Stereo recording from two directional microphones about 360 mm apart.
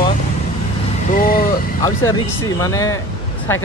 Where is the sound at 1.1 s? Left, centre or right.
Left.